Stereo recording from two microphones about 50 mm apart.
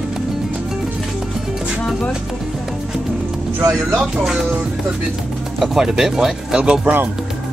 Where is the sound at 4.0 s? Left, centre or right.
Centre.